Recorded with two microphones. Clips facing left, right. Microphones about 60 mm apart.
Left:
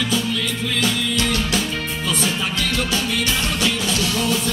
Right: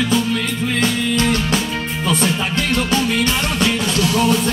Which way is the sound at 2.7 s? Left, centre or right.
Right.